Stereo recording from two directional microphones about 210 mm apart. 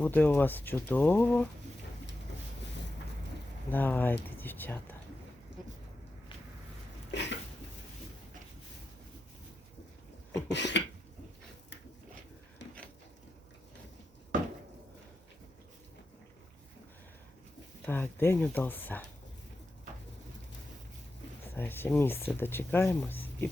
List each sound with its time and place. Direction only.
0.0 s speech: 10° left (ahead or behind)
3.7 s speech: 10° left (ahead or behind)
7.1 s a sound: 55° left (ahead or behind)
10.5 s a sound: 55° left (ahead or behind)
17.8 s speech: 10° left (ahead or behind)
21.4 s speech: 10° left (ahead or behind)